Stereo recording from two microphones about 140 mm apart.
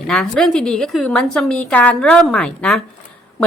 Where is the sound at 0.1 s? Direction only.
5° left (ahead or behind).